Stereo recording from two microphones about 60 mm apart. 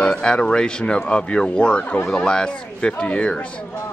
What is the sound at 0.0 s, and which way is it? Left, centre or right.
Speech, centre.